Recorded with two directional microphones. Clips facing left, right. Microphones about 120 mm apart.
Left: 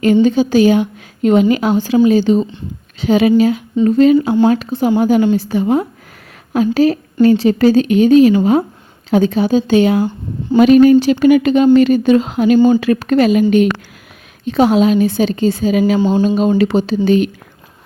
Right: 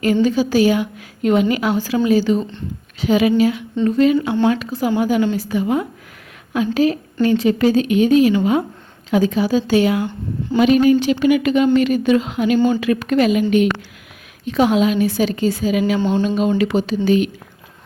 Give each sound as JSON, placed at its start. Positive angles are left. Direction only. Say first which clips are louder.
{"t": 0.0, "sound": "a woman's voice", "louder": "left 5 dB", "side_deg": 25}
{"t": 4.7, "sound": "a woman's voice", "louder": "left 5 dB", "side_deg": 25}
{"t": 10.6, "sound": "a woman's voice", "louder": "left 6 dB", "side_deg": 45}
{"t": 14.4, "sound": "a woman's voice", "louder": "left 4 dB", "side_deg": 30}
{"t": 16.0, "sound": "speech", "louder": "left 4 dB", "side_deg": 10}
{"t": 16.2, "sound": "a woman's voice", "louder": "left 4 dB", "side_deg": 35}